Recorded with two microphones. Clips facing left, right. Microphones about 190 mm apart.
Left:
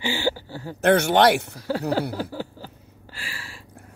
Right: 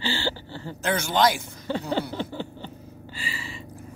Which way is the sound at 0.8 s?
65° left (ahead or behind).